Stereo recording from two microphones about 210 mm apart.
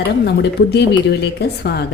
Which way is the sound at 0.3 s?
50° left (ahead or behind).